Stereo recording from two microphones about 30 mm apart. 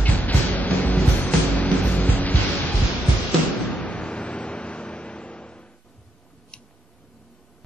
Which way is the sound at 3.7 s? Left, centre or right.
Left.